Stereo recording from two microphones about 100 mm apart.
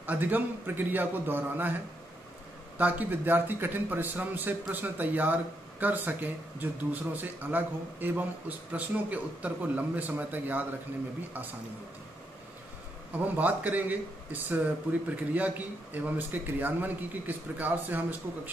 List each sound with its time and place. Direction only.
0.0 s a man's voice: 15° right (ahead or behind)
2.8 s a man's voice: 20° right (ahead or behind)
13.2 s a man's voice: 15° right (ahead or behind)